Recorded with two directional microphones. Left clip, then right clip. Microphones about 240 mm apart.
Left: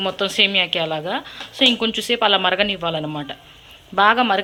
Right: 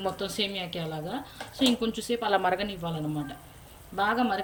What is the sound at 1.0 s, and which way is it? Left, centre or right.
Speech, centre.